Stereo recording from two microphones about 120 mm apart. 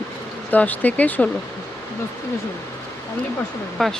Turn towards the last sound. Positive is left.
turn(degrees=0)  # may be behind; listen again after turning